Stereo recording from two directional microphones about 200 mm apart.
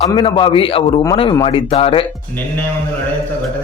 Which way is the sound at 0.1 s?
25° left (ahead or behind).